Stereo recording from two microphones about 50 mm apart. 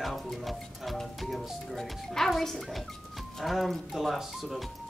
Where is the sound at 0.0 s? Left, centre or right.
Centre.